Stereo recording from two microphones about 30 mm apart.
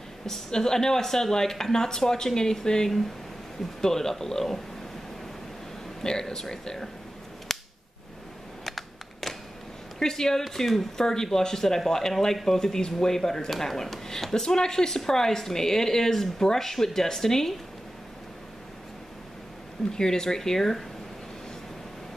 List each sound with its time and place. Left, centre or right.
0.5 s speech: centre
6.0 s speech: centre
7.5 s cap gun: centre
8.6 s a sound: centre
9.9 s speech: centre
10.4 s speech: centre
11.0 s speech: left
20.0 s speech: centre